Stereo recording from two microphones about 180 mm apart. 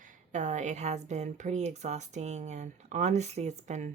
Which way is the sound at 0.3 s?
40° right (ahead or behind).